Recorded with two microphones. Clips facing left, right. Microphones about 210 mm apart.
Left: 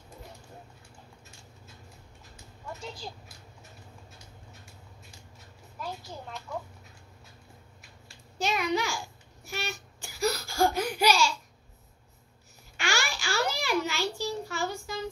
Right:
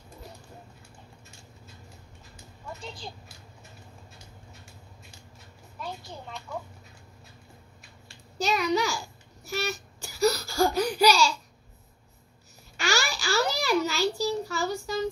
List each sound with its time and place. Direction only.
2.8 s speech: 5° left (ahead or behind)
5.8 s a woman's voice: 5° left (ahead or behind)
8.4 s a child's voice: 40° right (ahead or behind)
10.0 s a sound: 40° right (ahead or behind)
12.7 s babbling: 40° right (ahead or behind)